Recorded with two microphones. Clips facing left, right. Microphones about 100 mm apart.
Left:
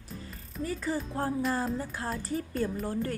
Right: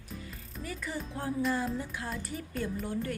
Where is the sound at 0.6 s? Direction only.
35° left (ahead or behind).